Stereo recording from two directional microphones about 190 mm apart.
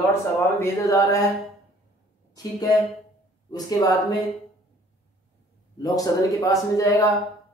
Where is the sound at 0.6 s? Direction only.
15° left (ahead or behind).